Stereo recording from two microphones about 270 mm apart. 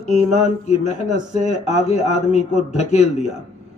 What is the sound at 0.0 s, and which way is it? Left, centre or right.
A man's voice, left.